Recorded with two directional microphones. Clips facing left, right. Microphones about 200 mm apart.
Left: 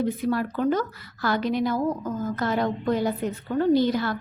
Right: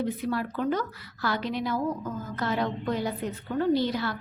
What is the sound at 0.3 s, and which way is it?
A woman's voice, 45° left (ahead or behind).